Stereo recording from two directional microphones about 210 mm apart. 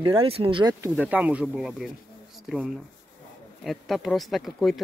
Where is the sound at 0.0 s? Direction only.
25° right (ahead or behind).